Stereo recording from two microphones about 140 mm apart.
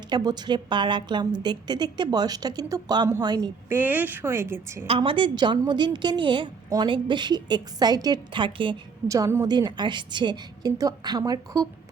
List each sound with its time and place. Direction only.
0.1 s a woman's voice: 30° right (ahead or behind)
3.7 s a woman's voice: 15° right (ahead or behind)
4.9 s a woman's voice: 40° right (ahead or behind)
9.0 s a woman's voice: 25° right (ahead or behind)